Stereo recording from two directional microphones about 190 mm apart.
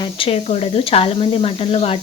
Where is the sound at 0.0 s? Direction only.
30° left (ahead or behind).